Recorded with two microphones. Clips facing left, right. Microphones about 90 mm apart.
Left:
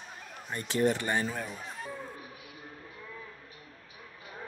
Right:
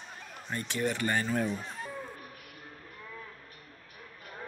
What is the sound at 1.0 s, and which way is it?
Speech, 15° left (ahead or behind).